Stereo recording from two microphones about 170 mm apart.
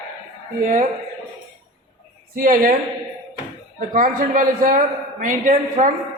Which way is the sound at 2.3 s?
55° right (ahead or behind).